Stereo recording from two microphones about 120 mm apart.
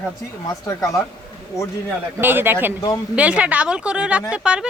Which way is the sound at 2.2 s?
15° right (ahead or behind).